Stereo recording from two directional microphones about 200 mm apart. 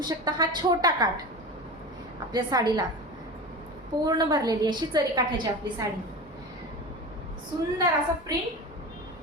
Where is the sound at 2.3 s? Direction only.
20° right (ahead or behind).